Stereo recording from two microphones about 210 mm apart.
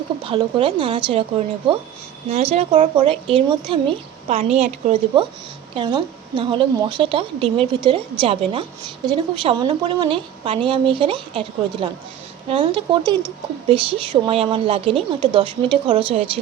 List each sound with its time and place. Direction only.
0.3 s a woman's voice: 25° right (ahead or behind)